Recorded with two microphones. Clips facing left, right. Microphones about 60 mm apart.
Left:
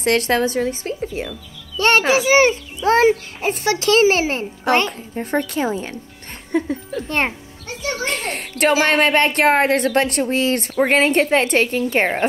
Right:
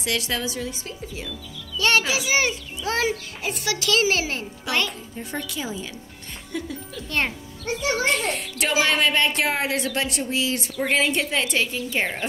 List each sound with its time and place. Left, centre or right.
0.0 s a woman's voice: left